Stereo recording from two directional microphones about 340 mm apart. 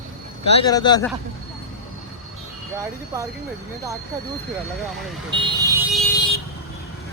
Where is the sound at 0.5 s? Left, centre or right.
Centre.